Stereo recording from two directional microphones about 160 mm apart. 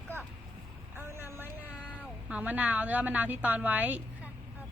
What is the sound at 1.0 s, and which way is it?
Vehicle, 15° right (ahead or behind).